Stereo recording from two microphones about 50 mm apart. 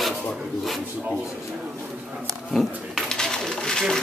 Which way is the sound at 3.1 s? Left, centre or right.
Centre.